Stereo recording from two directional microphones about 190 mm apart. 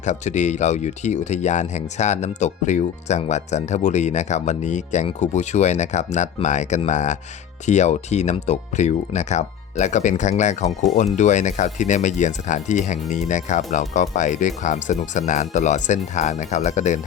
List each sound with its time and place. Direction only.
0.0 s speech: 40° left (ahead or behind)